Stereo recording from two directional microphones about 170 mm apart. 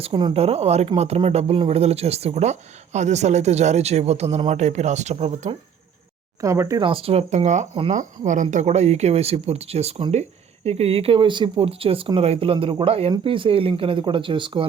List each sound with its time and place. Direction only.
0.0 s speech: 30° right (ahead or behind)
6.4 s speech: 15° right (ahead or behind)
6.8 s speech: 35° right (ahead or behind)